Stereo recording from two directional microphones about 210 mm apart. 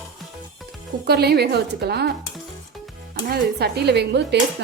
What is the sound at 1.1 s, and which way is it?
Speech, 50° right (ahead or behind).